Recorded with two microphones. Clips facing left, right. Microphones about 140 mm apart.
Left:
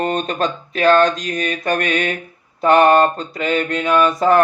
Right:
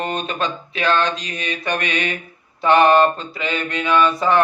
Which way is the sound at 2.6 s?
40° left (ahead or behind).